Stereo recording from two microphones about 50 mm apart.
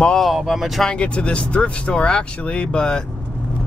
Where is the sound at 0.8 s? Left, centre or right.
Left.